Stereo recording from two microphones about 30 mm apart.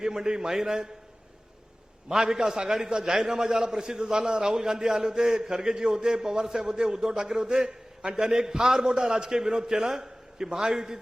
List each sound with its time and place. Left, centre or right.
0.0 s a man's voice: right
2.0 s a man's voice: right